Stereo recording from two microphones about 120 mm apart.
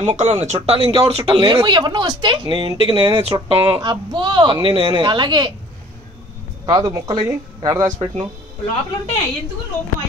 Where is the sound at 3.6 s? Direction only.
35° right (ahead or behind).